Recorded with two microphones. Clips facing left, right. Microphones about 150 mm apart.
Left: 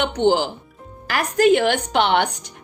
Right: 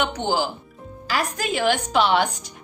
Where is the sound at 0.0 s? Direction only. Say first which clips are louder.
Left 5 dB; 60° left (ahead or behind).